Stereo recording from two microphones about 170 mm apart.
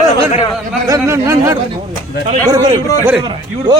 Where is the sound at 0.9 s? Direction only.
20° right (ahead or behind).